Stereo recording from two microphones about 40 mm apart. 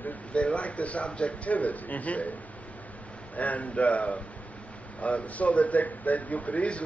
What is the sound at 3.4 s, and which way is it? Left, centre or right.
Speech, left.